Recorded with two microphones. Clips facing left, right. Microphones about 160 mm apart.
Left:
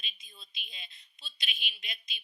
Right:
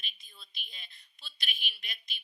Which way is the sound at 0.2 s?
20° left (ahead or behind).